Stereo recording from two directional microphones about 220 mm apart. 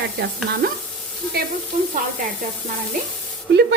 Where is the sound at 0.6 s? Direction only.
45° right (ahead or behind).